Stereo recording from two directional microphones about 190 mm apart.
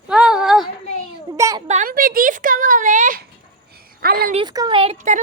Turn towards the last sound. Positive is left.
turn(degrees=-40)  # may be behind; listen again after turning